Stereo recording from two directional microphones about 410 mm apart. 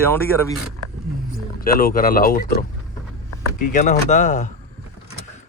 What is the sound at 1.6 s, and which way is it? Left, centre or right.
Speech, left.